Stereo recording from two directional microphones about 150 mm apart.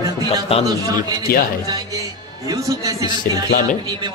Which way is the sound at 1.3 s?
85° left.